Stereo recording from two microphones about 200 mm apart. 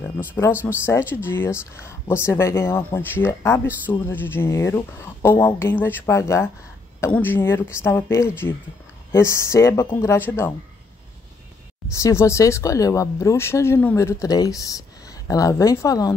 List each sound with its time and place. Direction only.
0.5 s speech: 10° right (ahead or behind)
0.8 s speech: 10° left (ahead or behind)
12.0 s speech: 15° left (ahead or behind)